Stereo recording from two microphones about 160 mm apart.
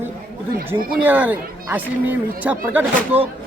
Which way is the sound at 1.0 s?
10° right (ahead or behind).